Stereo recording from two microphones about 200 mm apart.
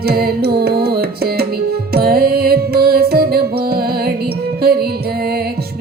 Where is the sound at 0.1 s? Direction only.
50° right (ahead or behind).